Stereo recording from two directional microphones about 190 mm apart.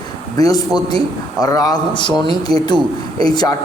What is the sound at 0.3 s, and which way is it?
A man's voice, 20° left (ahead or behind).